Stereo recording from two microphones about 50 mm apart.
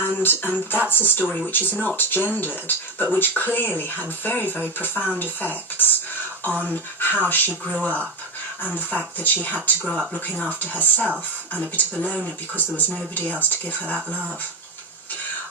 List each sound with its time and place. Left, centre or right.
0.2 s speech: left
10.6 s speech: left